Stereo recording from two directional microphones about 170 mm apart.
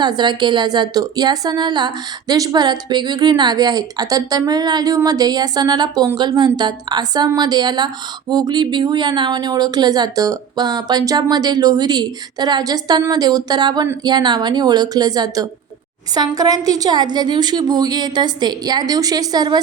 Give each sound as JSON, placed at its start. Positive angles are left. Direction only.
{"t": 0.0, "sound": "speech", "side_deg": -25}